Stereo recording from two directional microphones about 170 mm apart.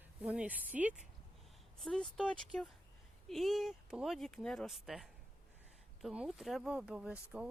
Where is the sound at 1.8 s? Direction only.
5° left (ahead or behind).